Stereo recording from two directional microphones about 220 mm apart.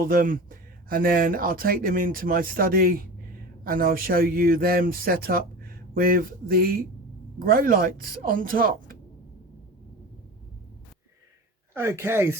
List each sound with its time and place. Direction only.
0.0 s speech: 40° right (ahead or behind)
11.7 s speech: 10° right (ahead or behind)